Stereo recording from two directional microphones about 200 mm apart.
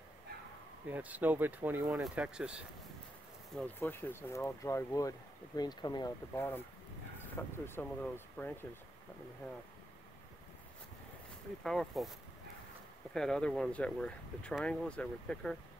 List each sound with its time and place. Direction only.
0.8 s speech: 10° right (ahead or behind)
3.5 s speech: 10° left (ahead or behind)
11.6 s speech: centre (ahead or behind)
13.1 s speech: 5° left (ahead or behind)